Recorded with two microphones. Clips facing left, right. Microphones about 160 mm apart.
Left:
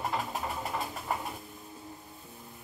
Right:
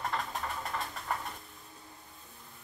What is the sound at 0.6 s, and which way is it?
Bird, 5° left (ahead or behind).